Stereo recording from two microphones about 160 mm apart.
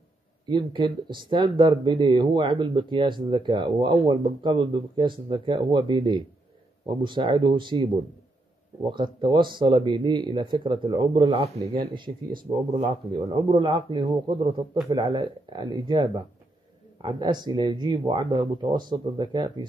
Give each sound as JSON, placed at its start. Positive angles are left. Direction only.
{"t": 0.5, "sound": "speech", "side_deg": -30}
{"t": 11.7, "sound": "speech", "side_deg": -30}